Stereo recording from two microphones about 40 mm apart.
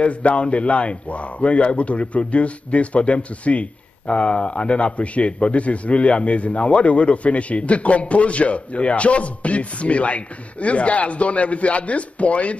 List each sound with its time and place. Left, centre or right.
0.0 s a man's voice: left